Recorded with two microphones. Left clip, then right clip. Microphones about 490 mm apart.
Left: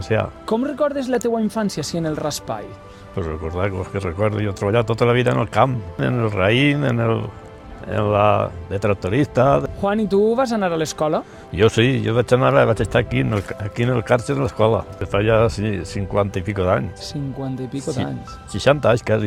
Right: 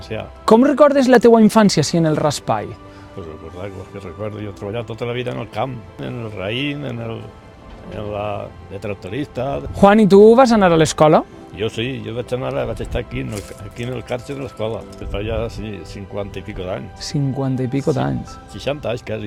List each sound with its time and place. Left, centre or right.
0.1 s speech: left
0.4 s speech: right
3.6 s speech: left
9.8 s speech: right
11.5 s speech: left
17.0 s speech: right
18.5 s speech: left